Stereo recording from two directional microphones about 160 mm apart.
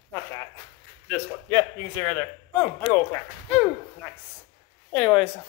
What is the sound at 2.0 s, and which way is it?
Speech, 20° left (ahead or behind).